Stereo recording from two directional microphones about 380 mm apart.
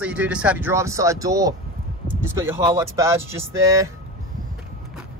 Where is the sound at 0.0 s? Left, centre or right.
Centre.